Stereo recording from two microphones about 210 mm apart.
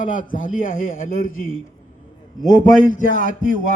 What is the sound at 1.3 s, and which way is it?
Speech, 75° left (ahead or behind).